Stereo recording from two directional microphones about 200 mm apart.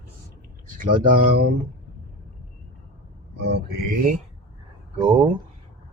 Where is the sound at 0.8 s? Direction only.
45° right (ahead or behind).